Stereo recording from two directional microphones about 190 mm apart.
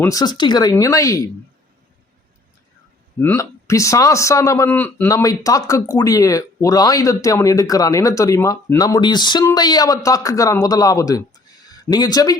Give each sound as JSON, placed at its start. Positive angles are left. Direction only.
{"t": 0.0, "sound": "a man's voice", "side_deg": 20}
{"t": 3.2, "sound": "a man's voice", "side_deg": 15}